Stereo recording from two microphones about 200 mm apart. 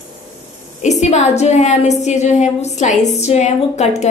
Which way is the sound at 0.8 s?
35° left (ahead or behind).